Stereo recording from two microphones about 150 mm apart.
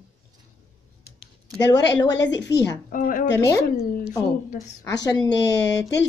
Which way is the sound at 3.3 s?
20° left (ahead or behind).